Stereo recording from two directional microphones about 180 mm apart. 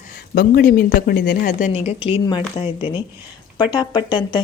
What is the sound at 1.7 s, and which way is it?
A woman's voice, 35° left (ahead or behind).